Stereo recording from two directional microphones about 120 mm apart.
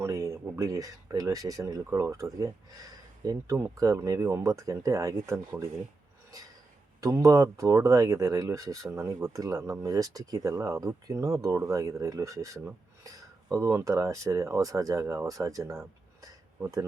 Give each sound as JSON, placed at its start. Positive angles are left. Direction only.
{"t": 0.0, "sound": "speech", "side_deg": -25}
{"t": 7.0, "sound": "speech", "side_deg": -25}